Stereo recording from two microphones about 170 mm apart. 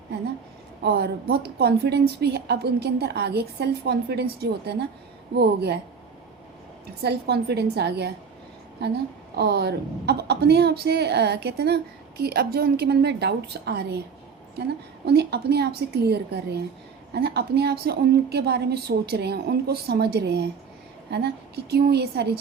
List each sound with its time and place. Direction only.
0.9 s a woman's voice: 70° right (ahead or behind)
7.0 s a woman's voice: 75° right (ahead or behind)
15.0 s a woman's voice: 75° right (ahead or behind)